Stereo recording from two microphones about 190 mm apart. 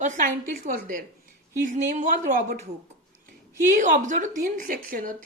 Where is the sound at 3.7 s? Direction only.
40° right (ahead or behind).